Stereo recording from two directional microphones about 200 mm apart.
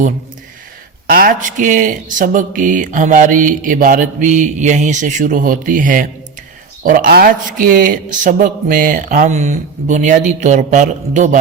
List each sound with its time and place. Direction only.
1.0 s speech: 45° right (ahead or behind)